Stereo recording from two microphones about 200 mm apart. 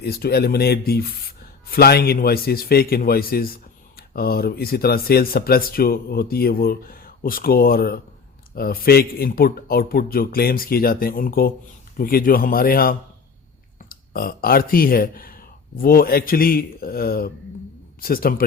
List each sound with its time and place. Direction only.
0.0 s a man's voice: 50° left (ahead or behind)